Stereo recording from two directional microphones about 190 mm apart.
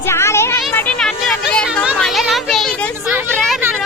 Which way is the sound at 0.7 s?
10° left (ahead or behind).